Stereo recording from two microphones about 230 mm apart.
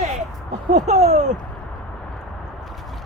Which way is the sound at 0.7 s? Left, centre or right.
Right.